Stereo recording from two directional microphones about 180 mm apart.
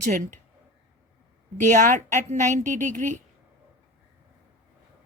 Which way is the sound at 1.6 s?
45° right (ahead or behind).